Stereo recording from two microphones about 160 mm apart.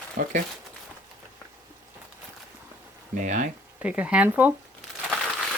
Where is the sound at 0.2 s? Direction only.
55° right (ahead or behind).